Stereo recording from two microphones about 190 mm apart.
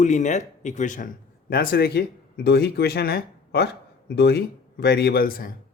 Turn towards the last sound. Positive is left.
turn(degrees=50)  # may be behind; listen again after turning